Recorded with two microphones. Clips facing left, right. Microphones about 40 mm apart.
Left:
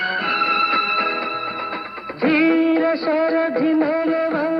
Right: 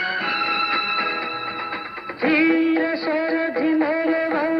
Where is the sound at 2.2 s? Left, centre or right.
Centre.